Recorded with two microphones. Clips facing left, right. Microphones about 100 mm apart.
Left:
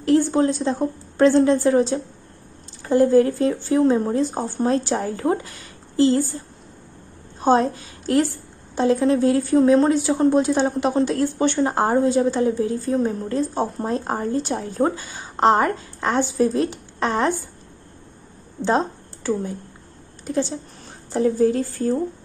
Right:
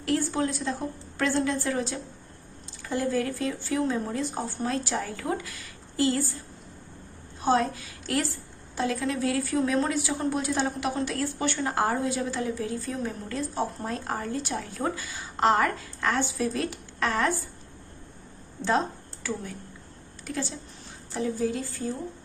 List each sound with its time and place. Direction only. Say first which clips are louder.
0.3 s speech: left 9 dB; 30° left (ahead or behind)
7.3 s a woman's voice: left 6 dB; 30° left (ahead or behind)
18.6 s a woman's voice: left 5 dB; 30° left (ahead or behind)
21.1 s speech: left 10 dB; 45° left (ahead or behind)